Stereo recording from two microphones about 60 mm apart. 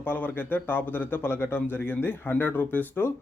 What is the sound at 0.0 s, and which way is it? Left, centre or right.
Speech, left.